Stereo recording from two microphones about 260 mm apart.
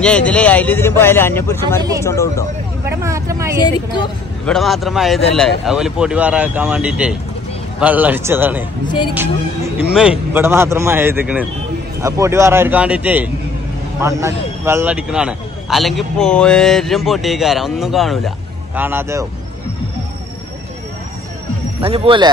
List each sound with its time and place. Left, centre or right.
0.0 s a man's voice: centre
1.8 s a man's voice: centre
2.0 s a man's voice: centre
3.0 s a man's voice: centre
4.5 s a man's voice: centre
9.9 s a man's voice: centre
21.8 s speech: right